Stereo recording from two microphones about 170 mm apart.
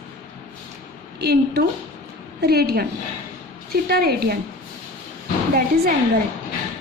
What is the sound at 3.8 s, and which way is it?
Speech, 65° right (ahead or behind).